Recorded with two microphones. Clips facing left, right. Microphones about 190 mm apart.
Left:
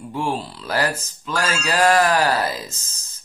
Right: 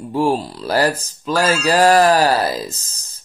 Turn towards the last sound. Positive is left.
turn(degrees=-35)  # may be behind; listen again after turning